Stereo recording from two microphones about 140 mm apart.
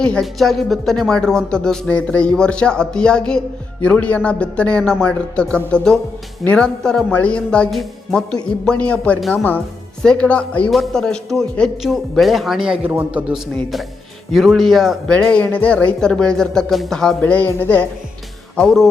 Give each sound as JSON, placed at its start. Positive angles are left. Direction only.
{"t": 0.0, "sound": "speech", "side_deg": 5}